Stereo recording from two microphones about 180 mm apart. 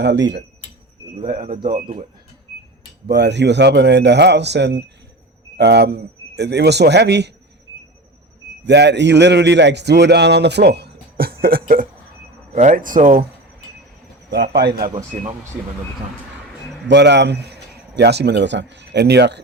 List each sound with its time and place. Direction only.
0.0 s a man's voice: 75° right (ahead or behind)
3.1 s a man's voice: 70° right (ahead or behind)
8.6 s a man's voice: 70° right (ahead or behind); by 13.2 s 45° right (ahead or behind)
14.3 s a man's voice: 75° right (ahead or behind)
16.9 s a man's voice: 75° right (ahead or behind)